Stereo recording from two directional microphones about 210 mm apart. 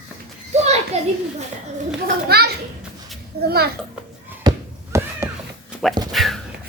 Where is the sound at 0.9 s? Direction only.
30° right (ahead or behind).